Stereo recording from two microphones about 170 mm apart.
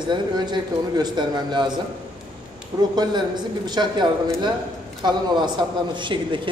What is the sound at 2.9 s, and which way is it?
A man's voice, 25° right (ahead or behind).